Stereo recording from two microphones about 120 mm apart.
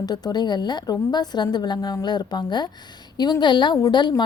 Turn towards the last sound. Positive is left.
turn(degrees=40)  # may be behind; listen again after turning